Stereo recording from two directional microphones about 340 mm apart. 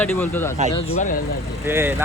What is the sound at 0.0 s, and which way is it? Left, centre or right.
Speech, centre.